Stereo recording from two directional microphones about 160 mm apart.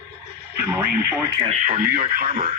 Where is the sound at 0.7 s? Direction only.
15° right (ahead or behind).